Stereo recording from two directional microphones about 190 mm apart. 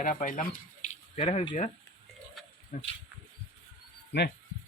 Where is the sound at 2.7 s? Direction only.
45° left (ahead or behind).